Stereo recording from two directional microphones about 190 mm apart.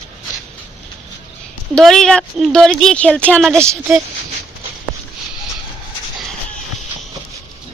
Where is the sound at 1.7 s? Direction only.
Centre (ahead or behind).